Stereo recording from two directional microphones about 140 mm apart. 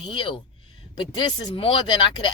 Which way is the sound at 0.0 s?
40° left (ahead or behind).